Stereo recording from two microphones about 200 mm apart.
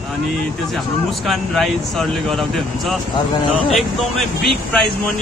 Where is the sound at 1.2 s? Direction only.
Centre (ahead or behind).